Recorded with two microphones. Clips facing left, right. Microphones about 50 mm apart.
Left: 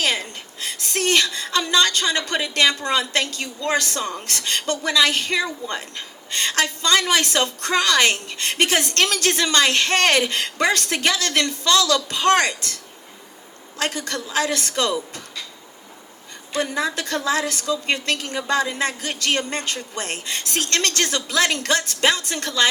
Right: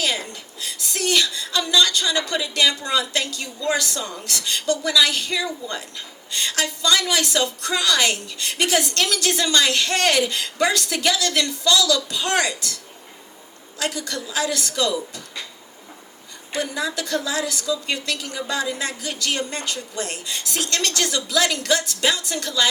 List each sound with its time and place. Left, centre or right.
0.0 s a woman's voice: left
16.6 s a woman's voice: left